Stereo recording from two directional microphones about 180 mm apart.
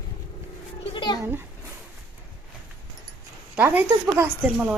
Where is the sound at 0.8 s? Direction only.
30° left (ahead or behind).